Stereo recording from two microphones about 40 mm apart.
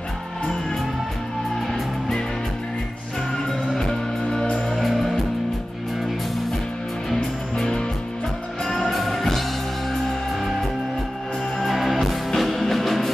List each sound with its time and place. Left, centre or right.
4.3 s music: centre
7.5 s music: centre
8.6 s music: centre
11.6 s music: centre